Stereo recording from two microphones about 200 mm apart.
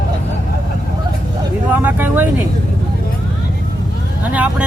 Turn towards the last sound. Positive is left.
turn(degrees=-5)  # may be behind; listen again after turning